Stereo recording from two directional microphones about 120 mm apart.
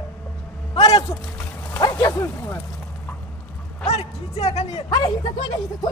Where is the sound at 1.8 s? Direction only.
25° left (ahead or behind).